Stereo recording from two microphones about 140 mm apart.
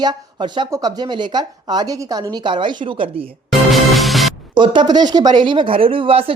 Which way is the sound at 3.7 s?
Centre (ahead or behind).